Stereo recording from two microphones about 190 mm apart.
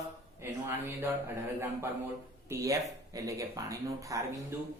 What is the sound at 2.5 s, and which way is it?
A man's voice, 15° right (ahead or behind).